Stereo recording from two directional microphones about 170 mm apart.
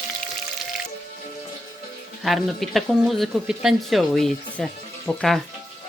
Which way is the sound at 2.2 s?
Centre (ahead or behind).